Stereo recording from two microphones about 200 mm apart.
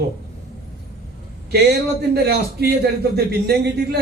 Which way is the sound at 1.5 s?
55° right (ahead or behind).